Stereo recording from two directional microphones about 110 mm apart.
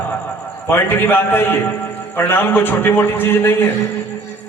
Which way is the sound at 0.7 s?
20° left (ahead or behind).